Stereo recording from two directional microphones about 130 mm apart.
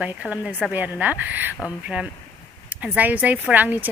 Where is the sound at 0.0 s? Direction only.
10° right (ahead or behind).